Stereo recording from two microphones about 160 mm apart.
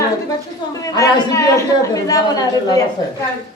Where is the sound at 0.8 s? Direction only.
20° left (ahead or behind).